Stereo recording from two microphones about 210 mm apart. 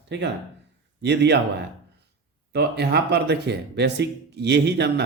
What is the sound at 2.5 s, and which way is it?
Speech, 50° right (ahead or behind).